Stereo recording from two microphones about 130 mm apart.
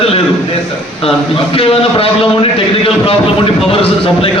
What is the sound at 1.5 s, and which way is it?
Speech, 45° left (ahead or behind).